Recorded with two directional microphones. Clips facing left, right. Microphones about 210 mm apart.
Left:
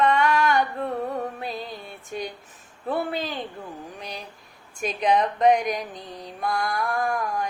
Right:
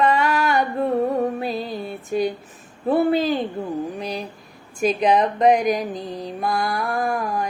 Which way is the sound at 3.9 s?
40° right (ahead or behind).